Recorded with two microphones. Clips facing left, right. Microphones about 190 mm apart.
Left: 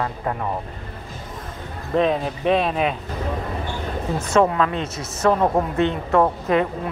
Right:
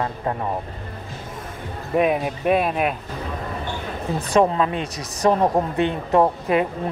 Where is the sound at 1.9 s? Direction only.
10° right (ahead or behind).